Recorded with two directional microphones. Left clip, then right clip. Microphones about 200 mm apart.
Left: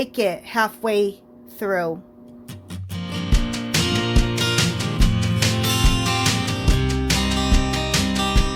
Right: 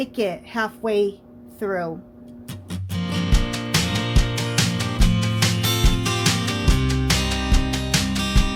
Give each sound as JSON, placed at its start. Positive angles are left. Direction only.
{"t": 0.0, "sound": "a woman's voice", "side_deg": 30}
{"t": 2.6, "sound": "music", "side_deg": 0}